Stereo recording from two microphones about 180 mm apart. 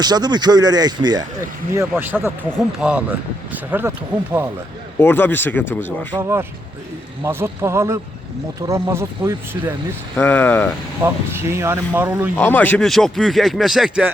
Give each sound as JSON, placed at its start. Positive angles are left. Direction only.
{"t": 0.0, "sound": "speech", "side_deg": -25}
{"t": 4.9, "sound": "speech", "side_deg": 10}
{"t": 6.1, "sound": "speech", "side_deg": -15}
{"t": 10.2, "sound": "speech", "side_deg": 10}
{"t": 11.0, "sound": "speech", "side_deg": -15}
{"t": 12.4, "sound": "speech", "side_deg": 10}